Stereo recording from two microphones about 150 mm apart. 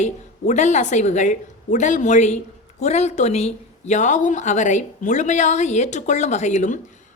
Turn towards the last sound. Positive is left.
turn(degrees=55)  # may be behind; listen again after turning